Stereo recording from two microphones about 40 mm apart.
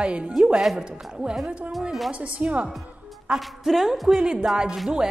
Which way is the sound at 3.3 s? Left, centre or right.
Centre.